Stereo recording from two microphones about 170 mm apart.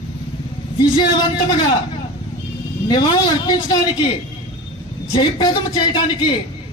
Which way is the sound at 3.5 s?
25° left (ahead or behind).